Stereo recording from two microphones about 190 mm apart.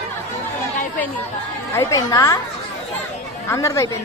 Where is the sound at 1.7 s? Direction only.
15° left (ahead or behind).